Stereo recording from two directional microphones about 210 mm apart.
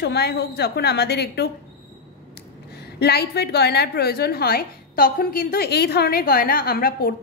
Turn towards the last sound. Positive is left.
turn(degrees=45)  # may be behind; listen again after turning